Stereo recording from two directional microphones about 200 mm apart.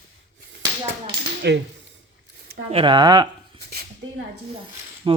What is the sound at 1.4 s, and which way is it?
Speech, 55° right (ahead or behind).